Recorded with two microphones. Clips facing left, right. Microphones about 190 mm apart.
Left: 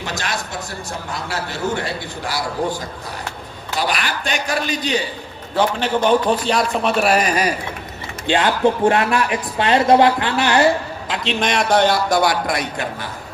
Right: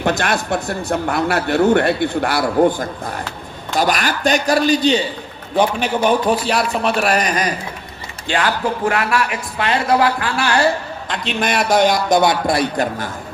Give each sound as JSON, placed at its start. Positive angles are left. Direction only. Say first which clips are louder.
{"t": 0.0, "sound": "a man's voice", "louder": "right 8 dB", "side_deg": -55}
{"t": 3.8, "sound": "a man's voice", "louder": "right 5 dB", "side_deg": -45}
{"t": 5.5, "sound": "a man's voice", "louder": "right 1 dB", "side_deg": -10}
{"t": 8.3, "sound": "a man's voice", "louder": "left 3 dB", "side_deg": 25}
{"t": 11.1, "sound": "a man's voice", "louder": "even", "side_deg": 0}